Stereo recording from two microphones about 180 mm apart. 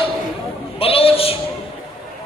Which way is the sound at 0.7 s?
30° left (ahead or behind).